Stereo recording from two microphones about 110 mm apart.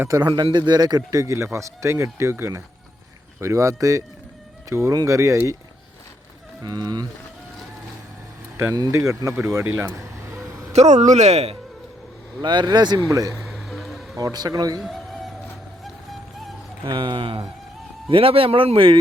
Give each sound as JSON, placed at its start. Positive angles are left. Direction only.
{"t": 0.1, "sound": "speech", "side_deg": -40}
{"t": 6.6, "sound": "speech", "side_deg": -40}
{"t": 8.5, "sound": "speech", "side_deg": -30}
{"t": 10.7, "sound": "speech", "side_deg": -85}
{"t": 12.4, "sound": "speech", "side_deg": -45}
{"t": 13.4, "sound": "a sound", "side_deg": 0}
{"t": 14.2, "sound": "speech", "side_deg": -35}
{"t": 14.8, "sound": "music", "side_deg": 0}
{"t": 16.8, "sound": "speech", "side_deg": -45}